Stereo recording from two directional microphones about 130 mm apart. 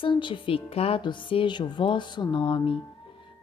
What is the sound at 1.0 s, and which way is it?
Music, 35° left (ahead or behind).